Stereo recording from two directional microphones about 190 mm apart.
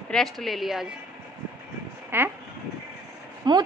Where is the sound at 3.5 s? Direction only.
25° right (ahead or behind).